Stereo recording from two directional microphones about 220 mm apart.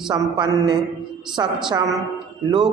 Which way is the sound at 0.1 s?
20° right (ahead or behind).